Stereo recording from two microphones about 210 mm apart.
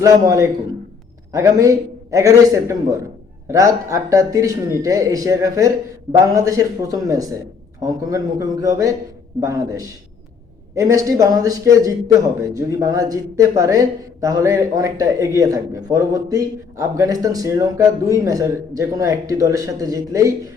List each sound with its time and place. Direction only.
0.0 s a man's voice: 15° right (ahead or behind)